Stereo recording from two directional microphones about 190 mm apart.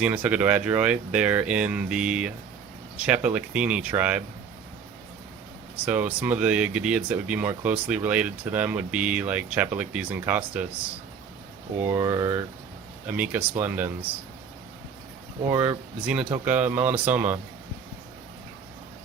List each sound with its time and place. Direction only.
0.0 s speech: 10° right (ahead or behind)
5.8 s speech: 10° right (ahead or behind)
11.8 s speech: 15° right (ahead or behind)
15.5 s speech: 10° right (ahead or behind)